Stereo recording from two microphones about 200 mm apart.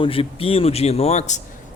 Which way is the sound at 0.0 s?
25° left (ahead or behind).